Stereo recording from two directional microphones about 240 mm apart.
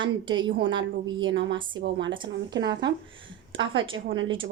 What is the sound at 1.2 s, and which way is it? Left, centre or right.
Speech, right.